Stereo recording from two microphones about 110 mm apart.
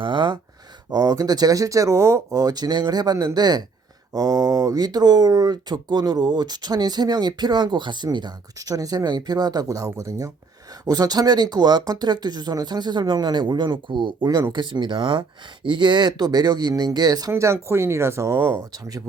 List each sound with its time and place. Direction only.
0.0 s speech: 45° right (ahead or behind)
0.9 s speech: 30° right (ahead or behind)